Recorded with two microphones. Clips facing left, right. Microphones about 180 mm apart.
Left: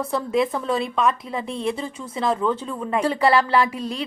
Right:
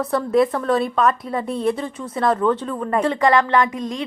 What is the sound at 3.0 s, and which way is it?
Speech, 30° left (ahead or behind).